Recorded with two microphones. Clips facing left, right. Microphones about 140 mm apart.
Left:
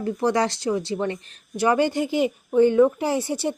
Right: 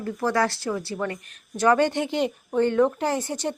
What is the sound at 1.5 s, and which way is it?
Speech, 10° left (ahead or behind).